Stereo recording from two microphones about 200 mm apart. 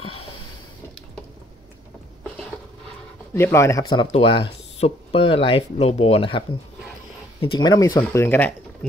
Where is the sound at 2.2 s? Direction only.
5° left (ahead or behind).